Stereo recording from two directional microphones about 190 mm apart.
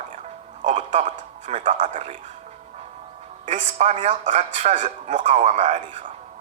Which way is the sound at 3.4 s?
40° right (ahead or behind).